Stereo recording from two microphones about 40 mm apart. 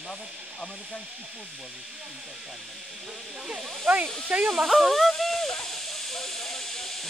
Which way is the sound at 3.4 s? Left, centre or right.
Right.